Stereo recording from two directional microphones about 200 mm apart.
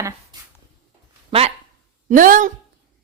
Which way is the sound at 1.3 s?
30° right (ahead or behind).